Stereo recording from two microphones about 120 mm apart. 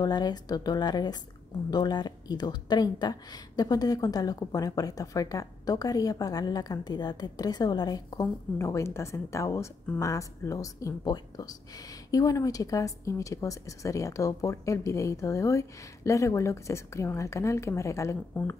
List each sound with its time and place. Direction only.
0.0 s speech: 35° left (ahead or behind)